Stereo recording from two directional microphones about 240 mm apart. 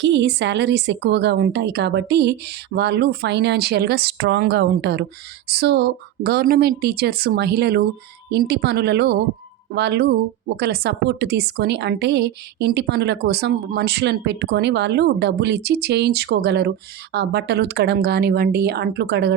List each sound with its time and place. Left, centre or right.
0.0 s a woman's voice: right